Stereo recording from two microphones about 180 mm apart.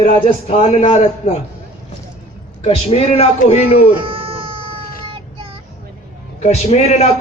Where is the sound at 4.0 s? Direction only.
30° right (ahead or behind).